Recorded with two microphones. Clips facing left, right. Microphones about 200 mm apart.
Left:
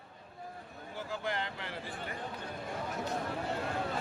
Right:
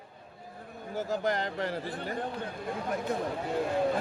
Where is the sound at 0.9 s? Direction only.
40° right (ahead or behind).